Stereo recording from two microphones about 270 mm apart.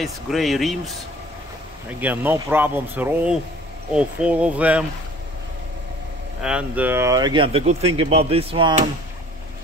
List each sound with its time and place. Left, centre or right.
0.0 s speech: centre
2.0 s speech: centre
6.4 s speech: centre